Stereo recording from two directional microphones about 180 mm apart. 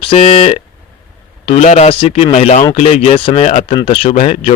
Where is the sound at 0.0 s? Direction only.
35° left (ahead or behind).